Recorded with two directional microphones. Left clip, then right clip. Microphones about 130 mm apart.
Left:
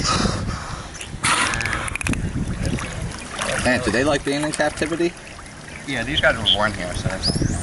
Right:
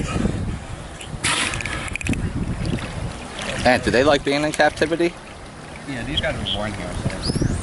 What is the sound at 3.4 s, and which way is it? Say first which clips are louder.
Speech: right 2 dB; 5° right (ahead or behind).